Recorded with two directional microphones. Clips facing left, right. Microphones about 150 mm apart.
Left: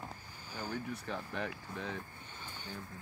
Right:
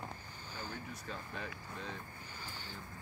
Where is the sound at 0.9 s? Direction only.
65° left (ahead or behind).